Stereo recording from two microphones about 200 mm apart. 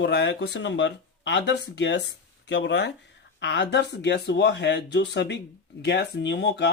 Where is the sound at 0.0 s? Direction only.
60° left (ahead or behind).